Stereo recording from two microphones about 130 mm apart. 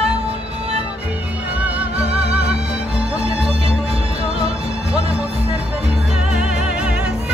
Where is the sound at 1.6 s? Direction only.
10° right (ahead or behind).